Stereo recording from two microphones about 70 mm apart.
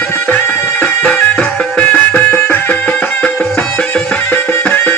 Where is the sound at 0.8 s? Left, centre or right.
Centre.